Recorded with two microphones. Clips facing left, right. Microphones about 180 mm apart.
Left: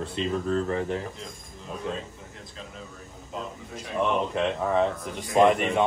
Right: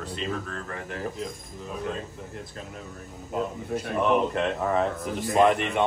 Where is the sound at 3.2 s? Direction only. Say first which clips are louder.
Right 7 dB; 55° right (ahead or behind).